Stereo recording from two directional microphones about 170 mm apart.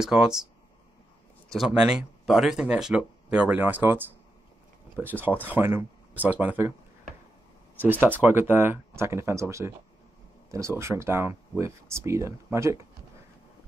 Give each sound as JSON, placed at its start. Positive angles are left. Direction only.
{"t": 0.0, "sound": "speech", "side_deg": -5}
{"t": 1.5, "sound": "speech", "side_deg": -5}
{"t": 5.2, "sound": "speech", "side_deg": -10}
{"t": 7.7, "sound": "speech", "side_deg": -10}